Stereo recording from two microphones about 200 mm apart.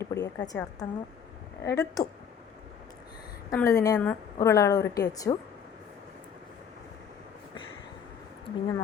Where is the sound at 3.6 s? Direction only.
15° left (ahead or behind).